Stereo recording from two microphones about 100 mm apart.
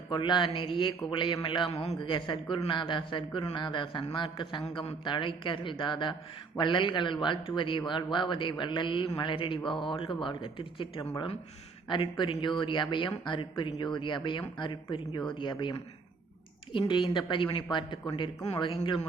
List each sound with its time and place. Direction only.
0.1 s a man's voice: 50° left (ahead or behind)
1.7 s a man's voice: 90° left
2.0 s a man's voice: 55° left (ahead or behind)
4.7 s a man's voice: 65° left (ahead or behind)